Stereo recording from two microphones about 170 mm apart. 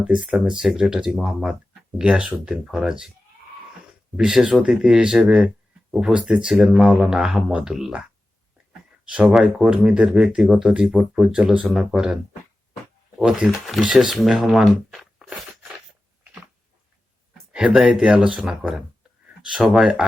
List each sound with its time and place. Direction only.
0.1 s speech: 5° right (ahead or behind)
4.2 s speech: 5° right (ahead or behind)
9.0 s speech: 5° right (ahead or behind)
17.5 s speech: 5° right (ahead or behind)